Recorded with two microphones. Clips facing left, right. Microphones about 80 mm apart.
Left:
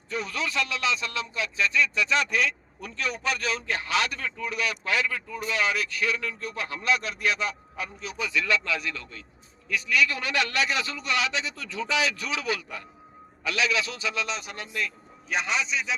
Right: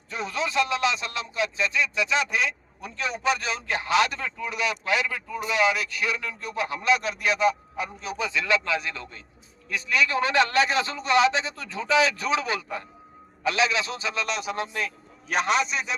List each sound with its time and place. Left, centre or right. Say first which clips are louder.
0.1 s a man's voice: right 2 dB; right
14.3 s speech: right 4 dB; right
14.5 s a man's voice: right 4 dB; right
15.3 s a man's voice: right 4 dB; right